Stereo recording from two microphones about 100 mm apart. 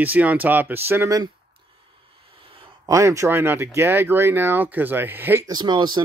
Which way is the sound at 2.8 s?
35° right (ahead or behind).